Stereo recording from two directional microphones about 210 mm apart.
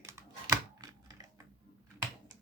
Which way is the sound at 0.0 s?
15° right (ahead or behind).